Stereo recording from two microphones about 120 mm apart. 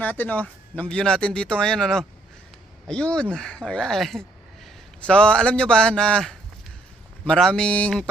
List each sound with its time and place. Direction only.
0.0 s speech: 15° left (ahead or behind)